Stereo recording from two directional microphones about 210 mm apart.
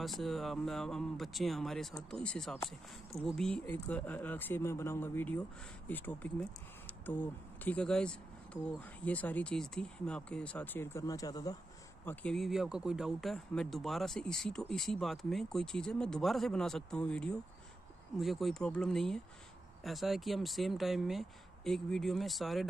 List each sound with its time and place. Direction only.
0.0 s speech: centre (ahead or behind)
3.1 s speech: 30° left (ahead or behind)
3.3 s speech: 5° left (ahead or behind)